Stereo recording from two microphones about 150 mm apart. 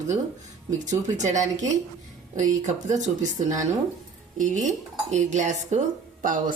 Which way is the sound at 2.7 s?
55° right (ahead or behind).